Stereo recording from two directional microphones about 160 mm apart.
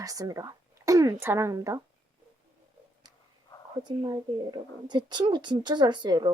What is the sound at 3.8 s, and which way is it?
A woman's voice, 25° right (ahead or behind).